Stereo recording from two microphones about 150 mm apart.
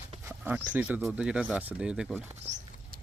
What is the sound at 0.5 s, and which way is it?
Speech, 10° right (ahead or behind).